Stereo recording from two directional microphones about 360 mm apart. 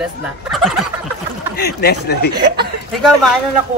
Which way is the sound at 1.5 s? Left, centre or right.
Left.